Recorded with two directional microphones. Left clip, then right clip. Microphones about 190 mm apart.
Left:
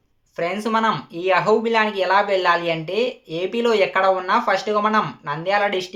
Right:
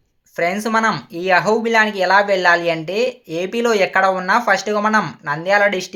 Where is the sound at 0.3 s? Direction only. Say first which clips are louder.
Right 4 dB; 35° right (ahead or behind).